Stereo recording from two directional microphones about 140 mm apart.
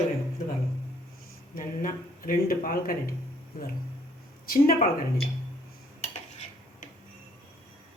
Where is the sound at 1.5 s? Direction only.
90° left.